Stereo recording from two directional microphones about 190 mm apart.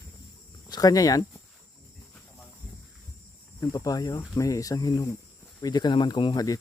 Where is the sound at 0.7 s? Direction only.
20° left (ahead or behind).